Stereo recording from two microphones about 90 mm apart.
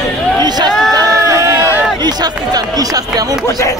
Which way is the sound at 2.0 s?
50° right (ahead or behind).